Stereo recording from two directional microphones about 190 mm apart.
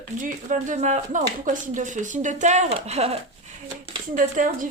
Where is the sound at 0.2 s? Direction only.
40° right (ahead or behind).